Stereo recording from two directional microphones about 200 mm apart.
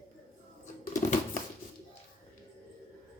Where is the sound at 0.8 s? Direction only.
40° left (ahead or behind).